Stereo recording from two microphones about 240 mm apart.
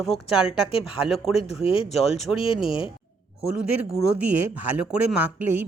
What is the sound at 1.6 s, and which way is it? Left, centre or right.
Speech, left.